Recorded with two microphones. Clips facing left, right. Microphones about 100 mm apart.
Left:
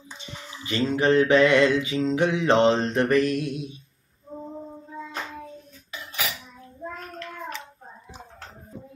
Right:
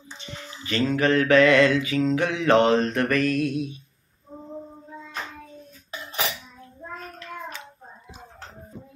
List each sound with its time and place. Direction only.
0.7 s mantra: 25° left (ahead or behind)